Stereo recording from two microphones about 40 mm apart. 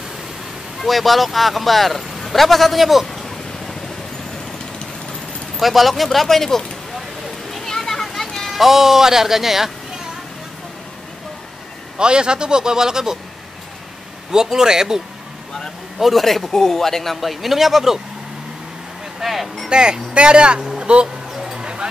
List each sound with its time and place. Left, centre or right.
0.7 s speech: centre
3.1 s a sound: centre
5.6 s speech: centre
7.5 s children playing: centre
8.5 s speech: centre
12.0 s a man's voice: right
14.3 s speech: centre
16.0 s speech: centre
19.1 s speech: centre
19.7 s a man's voice: right
21.5 s a sound: right